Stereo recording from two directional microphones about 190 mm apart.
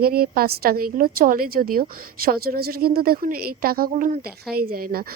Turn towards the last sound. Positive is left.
turn(degrees=-50)  # may be behind; listen again after turning